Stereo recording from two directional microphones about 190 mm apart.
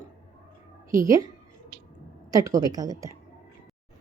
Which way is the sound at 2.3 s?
20° right (ahead or behind).